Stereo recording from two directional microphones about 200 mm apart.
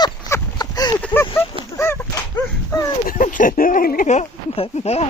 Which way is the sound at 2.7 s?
15° left (ahead or behind).